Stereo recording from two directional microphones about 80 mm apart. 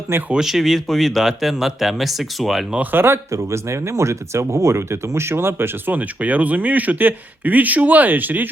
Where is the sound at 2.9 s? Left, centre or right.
Right.